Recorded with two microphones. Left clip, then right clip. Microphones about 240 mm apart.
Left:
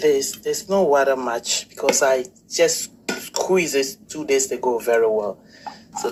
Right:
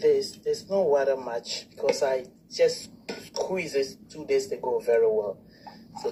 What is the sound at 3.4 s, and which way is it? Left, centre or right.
Speech, left.